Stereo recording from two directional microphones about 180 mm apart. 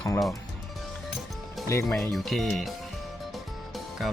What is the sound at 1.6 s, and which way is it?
Speech, 15° left (ahead or behind).